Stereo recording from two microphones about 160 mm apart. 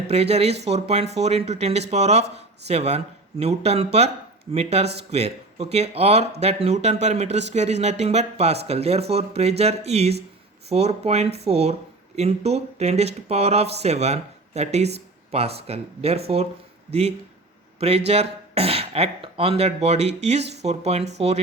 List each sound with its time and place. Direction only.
0.1 s speech: 40° right (ahead or behind)